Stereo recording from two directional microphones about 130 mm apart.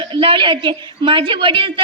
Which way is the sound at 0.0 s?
40° right (ahead or behind).